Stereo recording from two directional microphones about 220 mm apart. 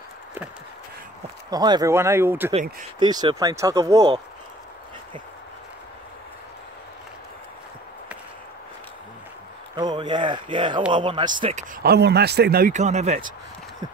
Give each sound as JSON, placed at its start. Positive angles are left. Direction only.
{"t": 1.5, "sound": "speech", "side_deg": -15}
{"t": 9.8, "sound": "speech", "side_deg": -20}
{"t": 11.4, "sound": "speech", "side_deg": -30}
{"t": 11.8, "sound": "a man's voice", "side_deg": -45}